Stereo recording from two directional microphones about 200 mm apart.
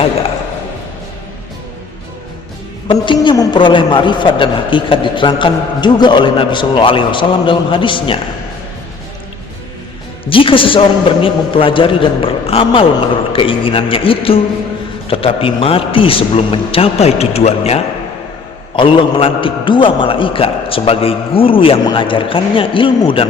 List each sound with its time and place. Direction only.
2.8 s a man's voice: 25° left (ahead or behind)
10.2 s a man's voice: 25° left (ahead or behind)